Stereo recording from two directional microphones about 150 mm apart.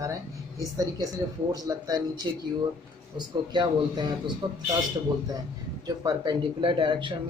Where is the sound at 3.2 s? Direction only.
30° right (ahead or behind).